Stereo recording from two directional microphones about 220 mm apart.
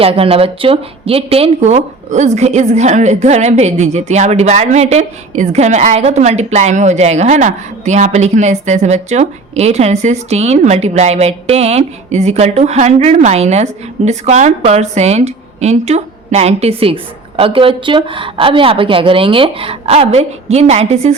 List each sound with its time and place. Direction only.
0.0 s a woman's voice: 25° right (ahead or behind)